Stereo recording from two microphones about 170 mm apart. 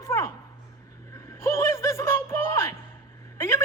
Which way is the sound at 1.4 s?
15° left (ahead or behind).